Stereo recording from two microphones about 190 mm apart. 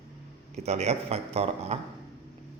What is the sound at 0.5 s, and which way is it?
A man's voice, 35° right (ahead or behind).